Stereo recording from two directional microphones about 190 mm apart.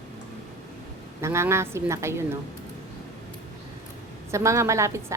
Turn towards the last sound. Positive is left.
turn(degrees=-15)  # may be behind; listen again after turning